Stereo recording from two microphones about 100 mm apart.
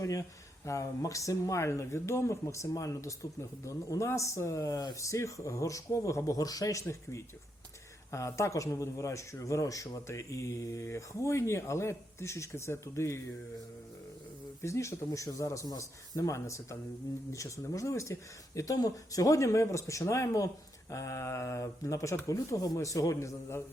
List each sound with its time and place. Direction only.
0.0 s speech: 35° left (ahead or behind)
14.6 s speech: 30° left (ahead or behind)